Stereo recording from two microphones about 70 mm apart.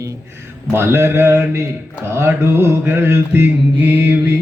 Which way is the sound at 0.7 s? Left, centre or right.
Right.